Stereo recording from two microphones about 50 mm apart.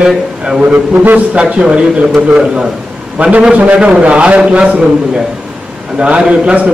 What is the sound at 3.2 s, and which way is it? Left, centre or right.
A man's voice, right.